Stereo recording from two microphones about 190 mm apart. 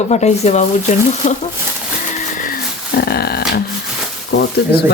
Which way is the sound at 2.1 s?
45° left (ahead or behind).